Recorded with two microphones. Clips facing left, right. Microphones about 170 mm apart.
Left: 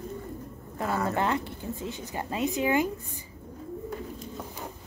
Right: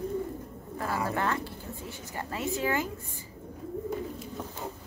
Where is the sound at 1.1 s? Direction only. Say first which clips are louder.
Left 3 dB; 20° left (ahead or behind).